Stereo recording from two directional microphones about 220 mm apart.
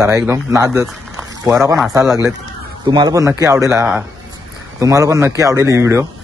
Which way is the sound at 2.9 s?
20° right (ahead or behind).